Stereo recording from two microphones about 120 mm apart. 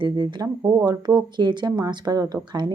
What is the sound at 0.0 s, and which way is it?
A woman's voice, 40° right (ahead or behind).